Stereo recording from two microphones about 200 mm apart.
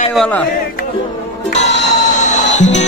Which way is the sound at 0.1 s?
Centre (ahead or behind).